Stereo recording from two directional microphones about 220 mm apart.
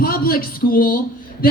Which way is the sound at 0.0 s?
40° left (ahead or behind).